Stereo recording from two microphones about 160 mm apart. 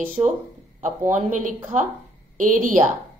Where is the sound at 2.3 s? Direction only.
55° right (ahead or behind).